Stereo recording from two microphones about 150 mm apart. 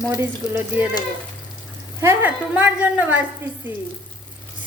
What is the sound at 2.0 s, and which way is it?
A woman's voice, 15° right (ahead or behind).